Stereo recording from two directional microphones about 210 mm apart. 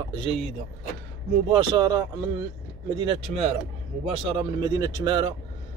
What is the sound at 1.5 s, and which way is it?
A man's voice, 20° right (ahead or behind).